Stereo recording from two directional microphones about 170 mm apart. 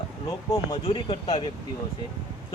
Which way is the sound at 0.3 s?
20° left (ahead or behind).